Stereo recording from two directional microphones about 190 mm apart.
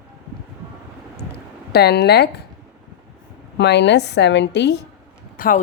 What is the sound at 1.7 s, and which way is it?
Speech, 60° left (ahead or behind).